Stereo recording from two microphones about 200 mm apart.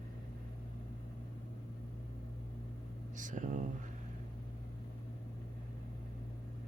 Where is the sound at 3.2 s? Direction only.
40° right (ahead or behind).